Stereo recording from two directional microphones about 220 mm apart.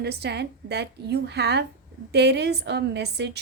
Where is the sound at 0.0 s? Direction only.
50° right (ahead or behind).